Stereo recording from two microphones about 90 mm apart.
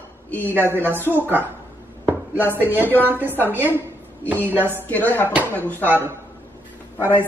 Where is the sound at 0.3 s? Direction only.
20° left (ahead or behind).